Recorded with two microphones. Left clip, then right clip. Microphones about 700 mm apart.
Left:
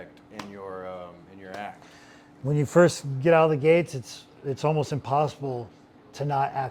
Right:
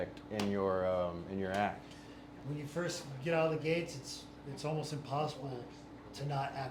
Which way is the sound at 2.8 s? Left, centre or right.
Left.